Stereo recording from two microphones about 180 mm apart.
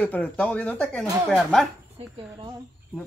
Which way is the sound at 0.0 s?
5° left (ahead or behind).